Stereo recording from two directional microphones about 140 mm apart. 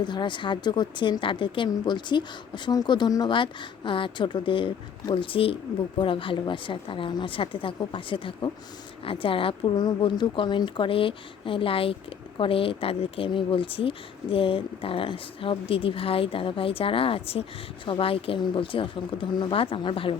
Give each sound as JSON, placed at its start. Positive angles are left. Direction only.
{"t": 0.0, "sound": "speech", "side_deg": 35}